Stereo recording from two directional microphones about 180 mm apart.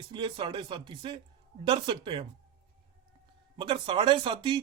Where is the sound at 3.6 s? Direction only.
25° right (ahead or behind).